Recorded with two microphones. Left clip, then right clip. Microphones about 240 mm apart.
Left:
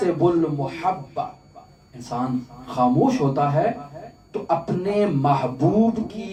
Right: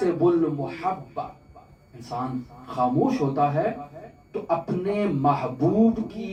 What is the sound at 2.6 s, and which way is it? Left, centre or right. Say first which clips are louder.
Speech: left 4 dB; left.